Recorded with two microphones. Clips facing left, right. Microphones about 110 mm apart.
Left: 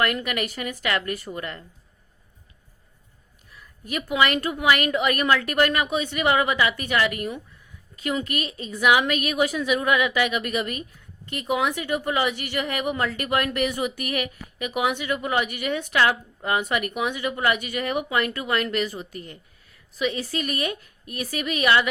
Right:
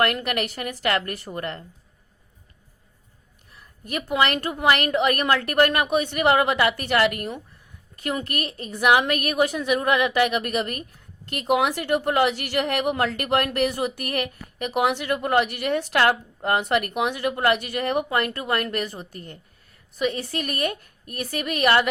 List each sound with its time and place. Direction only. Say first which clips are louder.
0.0 s a woman's voice: right 2 dB; 55° right (ahead or behind)
3.8 s a woman's voice: even; 45° right (ahead or behind)
11.3 s a woman's voice: right 3 dB; 70° right (ahead or behind); by 21.8 s 50° right (ahead or behind)